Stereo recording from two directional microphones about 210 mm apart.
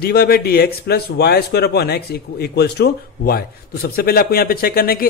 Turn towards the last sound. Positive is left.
turn(degrees=45)  # may be behind; listen again after turning